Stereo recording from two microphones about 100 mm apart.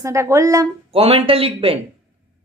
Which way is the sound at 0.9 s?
75° right (ahead or behind).